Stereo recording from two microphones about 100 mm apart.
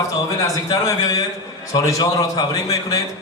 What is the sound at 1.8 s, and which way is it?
A man's voice, 40° left (ahead or behind).